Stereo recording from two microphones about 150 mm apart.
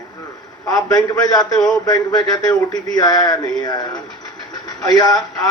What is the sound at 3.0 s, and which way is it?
A man's voice, 25° left (ahead or behind).